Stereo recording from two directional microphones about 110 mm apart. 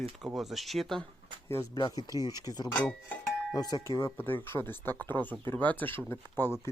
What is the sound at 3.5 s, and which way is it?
Speech, 35° left (ahead or behind).